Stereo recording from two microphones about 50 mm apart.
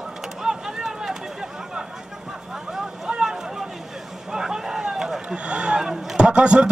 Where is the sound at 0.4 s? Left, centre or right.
Centre.